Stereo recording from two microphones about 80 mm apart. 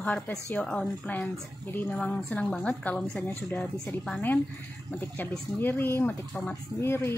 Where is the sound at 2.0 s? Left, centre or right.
Centre.